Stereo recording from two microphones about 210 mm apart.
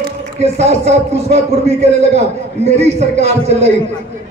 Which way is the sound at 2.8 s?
30° right (ahead or behind).